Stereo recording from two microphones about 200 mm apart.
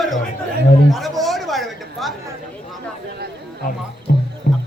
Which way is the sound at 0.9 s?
Centre (ahead or behind).